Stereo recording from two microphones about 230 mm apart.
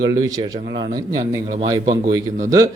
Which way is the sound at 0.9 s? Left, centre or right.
Centre.